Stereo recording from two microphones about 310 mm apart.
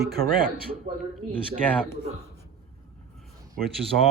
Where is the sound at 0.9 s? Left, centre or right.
Right.